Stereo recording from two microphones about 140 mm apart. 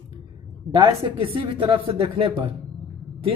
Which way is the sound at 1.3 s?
40° right (ahead or behind).